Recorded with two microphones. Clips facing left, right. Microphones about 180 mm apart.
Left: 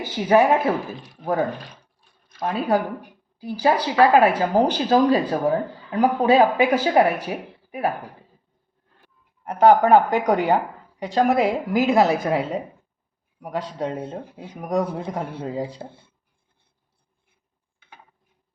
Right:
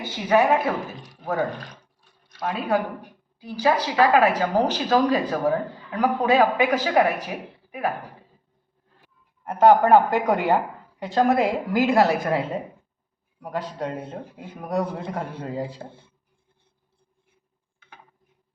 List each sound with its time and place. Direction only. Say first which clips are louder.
0.3 s speech: left 2 dB; 30° left (ahead or behind)
9.4 s a man's voice: left 1 dB; 15° left (ahead or behind)